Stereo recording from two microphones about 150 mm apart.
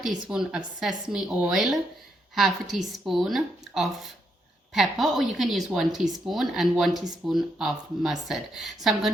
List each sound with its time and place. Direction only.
0.0 s a woman's voice: 5° right (ahead or behind)